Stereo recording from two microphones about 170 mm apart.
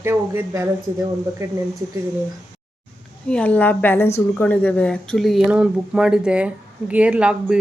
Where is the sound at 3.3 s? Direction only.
10° left (ahead or behind).